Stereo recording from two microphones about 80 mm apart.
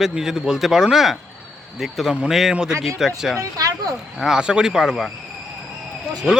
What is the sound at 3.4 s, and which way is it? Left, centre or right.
Speech, right.